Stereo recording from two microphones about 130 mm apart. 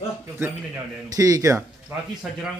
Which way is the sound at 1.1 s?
25° right (ahead or behind).